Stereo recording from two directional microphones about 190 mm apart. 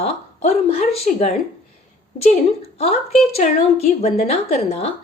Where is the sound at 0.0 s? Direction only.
35° left (ahead or behind).